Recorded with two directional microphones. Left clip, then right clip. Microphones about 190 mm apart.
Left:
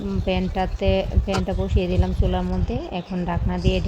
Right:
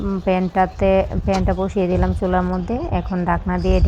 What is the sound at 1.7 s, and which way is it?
Speech, 50° right (ahead or behind).